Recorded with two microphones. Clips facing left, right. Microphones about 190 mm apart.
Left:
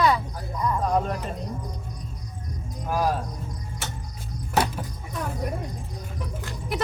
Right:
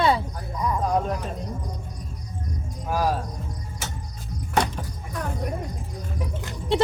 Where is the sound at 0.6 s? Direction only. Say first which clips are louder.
Even; 5° right (ahead or behind).